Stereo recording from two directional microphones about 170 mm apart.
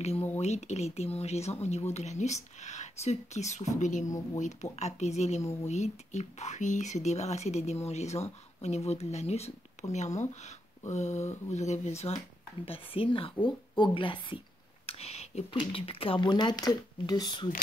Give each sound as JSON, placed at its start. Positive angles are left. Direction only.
{"t": 0.4, "sound": "speech", "side_deg": 40}